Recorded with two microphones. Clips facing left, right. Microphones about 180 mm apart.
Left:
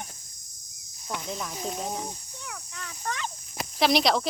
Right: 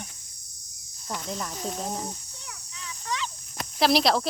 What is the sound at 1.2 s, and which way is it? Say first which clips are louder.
Speech: right 1 dB; 5° left (ahead or behind).